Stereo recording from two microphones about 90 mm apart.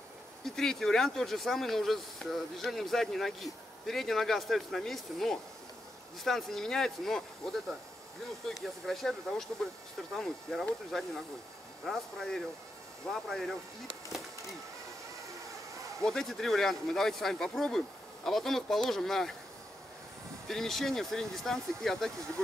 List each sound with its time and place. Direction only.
0.6 s speech: 5° left (ahead or behind)
8.5 s speech: centre (ahead or behind)
16.0 s speech: 5° left (ahead or behind)
20.4 s speech: 5° left (ahead or behind)